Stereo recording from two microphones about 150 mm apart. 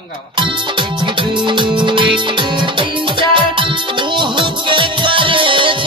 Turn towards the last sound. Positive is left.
turn(degrees=-35)  # may be behind; listen again after turning